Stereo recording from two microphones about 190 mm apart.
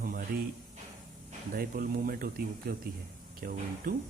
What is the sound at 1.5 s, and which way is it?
Speech, 50° right (ahead or behind).